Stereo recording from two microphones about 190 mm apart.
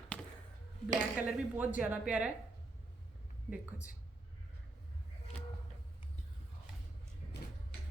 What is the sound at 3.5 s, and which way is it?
Speech, 10° right (ahead or behind).